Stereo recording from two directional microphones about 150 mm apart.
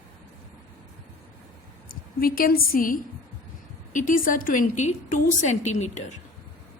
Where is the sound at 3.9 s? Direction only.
60° left (ahead or behind).